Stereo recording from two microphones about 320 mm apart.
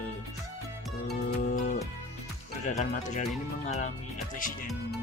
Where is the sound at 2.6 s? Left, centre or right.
Left.